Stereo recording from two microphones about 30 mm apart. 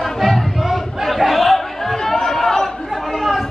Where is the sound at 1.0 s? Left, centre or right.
Centre.